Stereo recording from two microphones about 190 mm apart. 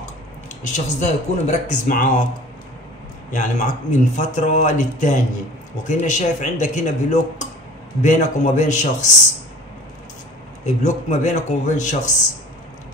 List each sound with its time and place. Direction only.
0.7 s speech: 40° left (ahead or behind)
3.3 s speech: 40° left (ahead or behind)
10.6 s speech: 40° left (ahead or behind)